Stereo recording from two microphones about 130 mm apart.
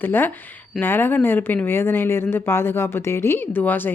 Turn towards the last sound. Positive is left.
turn(degrees=15)  # may be behind; listen again after turning